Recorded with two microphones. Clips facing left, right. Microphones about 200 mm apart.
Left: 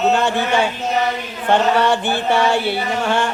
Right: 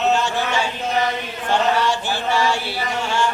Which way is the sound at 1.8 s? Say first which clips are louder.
Left 4 dB; 60° left (ahead or behind).